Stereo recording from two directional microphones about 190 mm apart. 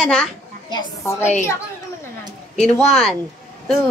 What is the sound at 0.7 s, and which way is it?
Speech, 25° left (ahead or behind).